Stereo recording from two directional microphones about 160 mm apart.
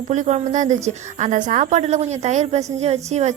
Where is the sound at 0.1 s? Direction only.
45° right (ahead or behind).